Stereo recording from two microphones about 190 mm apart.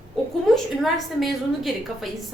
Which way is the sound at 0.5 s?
Centre (ahead or behind).